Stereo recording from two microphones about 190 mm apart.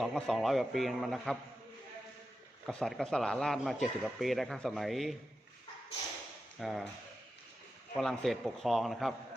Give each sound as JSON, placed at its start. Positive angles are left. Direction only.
{"t": 0.0, "sound": "a man's voice", "side_deg": 0}
{"t": 2.6, "sound": "a man's voice", "side_deg": 0}
{"t": 6.6, "sound": "a man's voice", "side_deg": 0}
{"t": 7.9, "sound": "a man's voice", "side_deg": 0}